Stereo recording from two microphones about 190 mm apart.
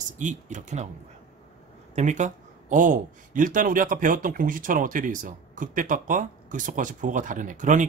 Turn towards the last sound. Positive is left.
turn(degrees=-40)  # may be behind; listen again after turning